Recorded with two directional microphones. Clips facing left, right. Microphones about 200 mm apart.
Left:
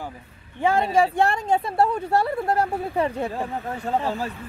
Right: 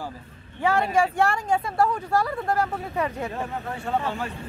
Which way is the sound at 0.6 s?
25° left (ahead or behind).